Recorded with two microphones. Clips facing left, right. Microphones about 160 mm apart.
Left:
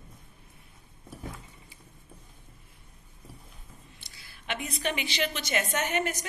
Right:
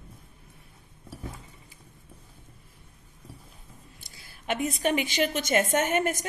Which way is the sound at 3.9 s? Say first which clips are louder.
Right 2 dB; 45° right (ahead or behind).